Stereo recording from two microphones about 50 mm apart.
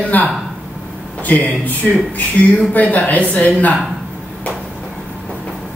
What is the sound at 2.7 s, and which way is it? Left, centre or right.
A woman's voice, left.